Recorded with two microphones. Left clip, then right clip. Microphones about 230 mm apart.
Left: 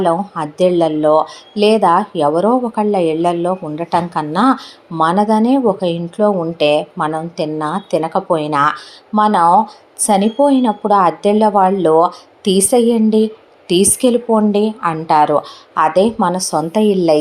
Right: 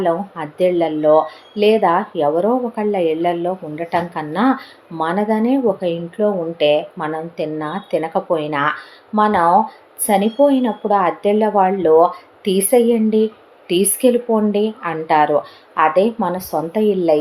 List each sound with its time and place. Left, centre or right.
0.0 s speech: left